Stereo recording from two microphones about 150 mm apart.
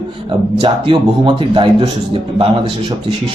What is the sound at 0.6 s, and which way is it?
A man's voice, 35° right (ahead or behind).